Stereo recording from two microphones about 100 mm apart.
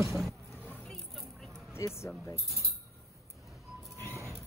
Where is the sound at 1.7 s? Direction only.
25° left (ahead or behind).